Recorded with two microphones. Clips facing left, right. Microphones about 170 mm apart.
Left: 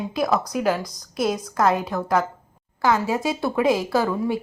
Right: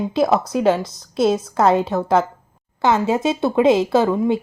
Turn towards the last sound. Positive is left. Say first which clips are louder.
# right 5 dB
turn(degrees=-20)  # may be behind; listen again after turning